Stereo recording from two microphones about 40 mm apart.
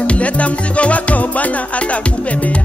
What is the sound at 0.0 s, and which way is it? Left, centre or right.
Music, left.